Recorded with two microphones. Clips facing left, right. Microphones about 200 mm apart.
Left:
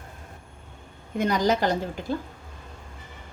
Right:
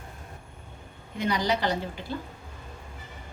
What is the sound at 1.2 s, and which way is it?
Speech, 45° left (ahead or behind).